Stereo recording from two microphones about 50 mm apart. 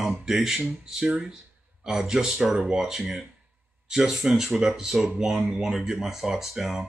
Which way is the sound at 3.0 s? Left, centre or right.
Centre.